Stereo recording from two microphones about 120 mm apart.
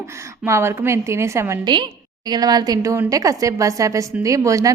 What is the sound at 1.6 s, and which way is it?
A woman's voice, 40° right (ahead or behind).